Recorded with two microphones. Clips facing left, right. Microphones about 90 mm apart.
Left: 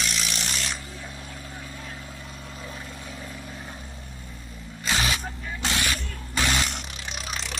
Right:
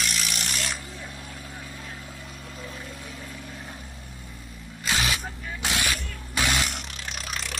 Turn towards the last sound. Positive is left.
turn(degrees=5)  # may be behind; listen again after turning